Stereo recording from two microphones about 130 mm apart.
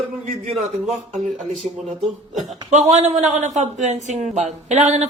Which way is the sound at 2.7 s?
65° right (ahead or behind).